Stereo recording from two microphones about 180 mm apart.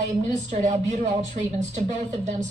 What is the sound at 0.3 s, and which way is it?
A woman's voice, 40° right (ahead or behind).